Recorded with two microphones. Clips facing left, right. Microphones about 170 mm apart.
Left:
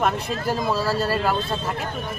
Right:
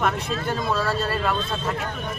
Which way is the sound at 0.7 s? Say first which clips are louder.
Even; 30° left (ahead or behind).